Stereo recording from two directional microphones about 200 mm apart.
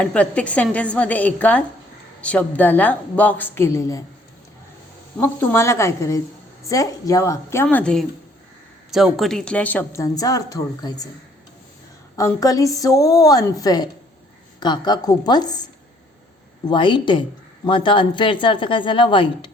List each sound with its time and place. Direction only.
0.0 s a woman's voice: 5° left (ahead or behind)
5.1 s a woman's voice: 10° left (ahead or behind)
12.1 s a woman's voice: 15° left (ahead or behind)
16.6 s a woman's voice: 25° left (ahead or behind)